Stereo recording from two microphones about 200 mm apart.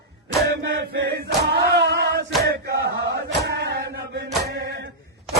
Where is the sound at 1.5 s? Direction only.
55° right (ahead or behind).